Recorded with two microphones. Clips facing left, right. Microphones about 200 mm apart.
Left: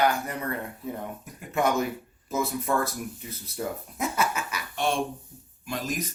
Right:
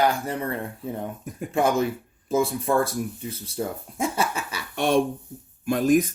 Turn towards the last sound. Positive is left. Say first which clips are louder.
# right 12 dB
turn(degrees=-55)  # may be behind; listen again after turning